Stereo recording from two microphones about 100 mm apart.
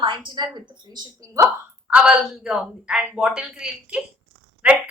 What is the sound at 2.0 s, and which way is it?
Speech, 10° right (ahead or behind).